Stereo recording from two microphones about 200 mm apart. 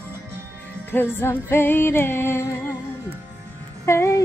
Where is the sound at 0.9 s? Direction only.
10° left (ahead or behind).